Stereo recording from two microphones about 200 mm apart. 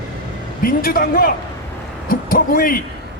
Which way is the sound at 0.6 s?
45° left (ahead or behind).